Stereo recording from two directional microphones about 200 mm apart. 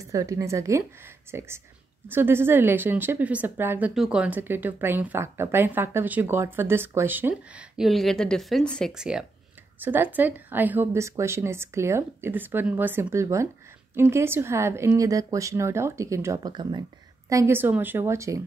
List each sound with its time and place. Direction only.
0.1 s a woman's voice: 15° right (ahead or behind)